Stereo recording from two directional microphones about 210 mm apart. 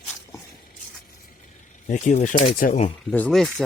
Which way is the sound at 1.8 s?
35° left (ahead or behind).